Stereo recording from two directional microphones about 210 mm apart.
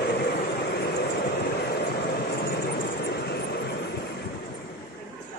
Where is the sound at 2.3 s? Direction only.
50° left (ahead or behind).